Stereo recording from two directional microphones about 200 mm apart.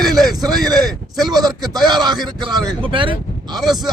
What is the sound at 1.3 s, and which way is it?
A man's voice, 20° right (ahead or behind).